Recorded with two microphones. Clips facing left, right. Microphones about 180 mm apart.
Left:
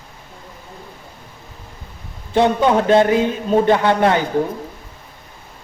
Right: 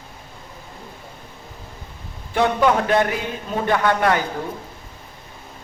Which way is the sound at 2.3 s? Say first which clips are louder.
Left 3 dB; 25° left (ahead or behind).